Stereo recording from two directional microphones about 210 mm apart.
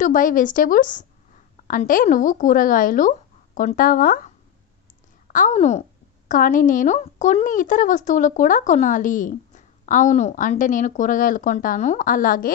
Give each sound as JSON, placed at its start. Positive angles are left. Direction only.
{"t": 0.0, "sound": "a woman's voice", "side_deg": 40}
{"t": 5.3, "sound": "a woman's voice", "side_deg": 35}